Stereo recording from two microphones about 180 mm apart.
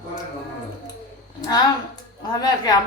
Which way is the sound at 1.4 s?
20° left (ahead or behind).